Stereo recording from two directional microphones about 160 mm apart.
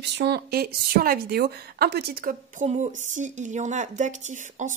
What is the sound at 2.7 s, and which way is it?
A woman's voice, 50° right (ahead or behind).